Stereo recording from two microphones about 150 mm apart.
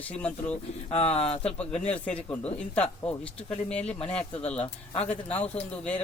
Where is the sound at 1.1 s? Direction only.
45° left (ahead or behind).